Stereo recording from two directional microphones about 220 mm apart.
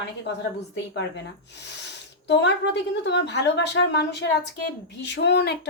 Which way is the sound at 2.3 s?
50° left (ahead or behind).